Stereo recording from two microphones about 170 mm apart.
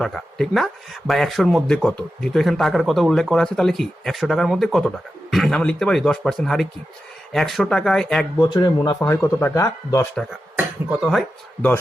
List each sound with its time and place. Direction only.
0.0 s a man's voice: centre (ahead or behind)
8.4 s speech: 25° left (ahead or behind)
10.6 s a sound: 10° right (ahead or behind)
11.0 s a man's voice: centre (ahead or behind)